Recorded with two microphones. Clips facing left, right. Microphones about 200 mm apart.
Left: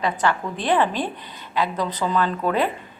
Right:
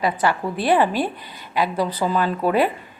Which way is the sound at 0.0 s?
10° right (ahead or behind).